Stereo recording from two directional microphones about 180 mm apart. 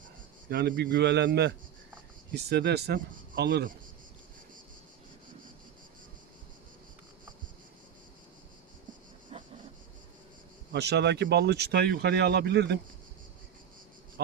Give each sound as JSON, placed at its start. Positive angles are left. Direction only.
{"t": 0.5, "sound": "a man's voice", "side_deg": -65}
{"t": 9.3, "sound": "a sound", "side_deg": -30}
{"t": 10.7, "sound": "speech", "side_deg": -70}